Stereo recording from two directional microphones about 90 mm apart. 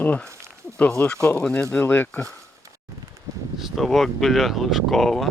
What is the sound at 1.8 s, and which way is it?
Speech, 20° left (ahead or behind).